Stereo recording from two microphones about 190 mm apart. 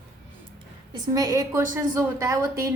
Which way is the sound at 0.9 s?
20° right (ahead or behind).